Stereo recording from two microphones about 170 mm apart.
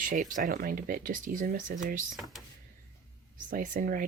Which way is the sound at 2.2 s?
Centre (ahead or behind).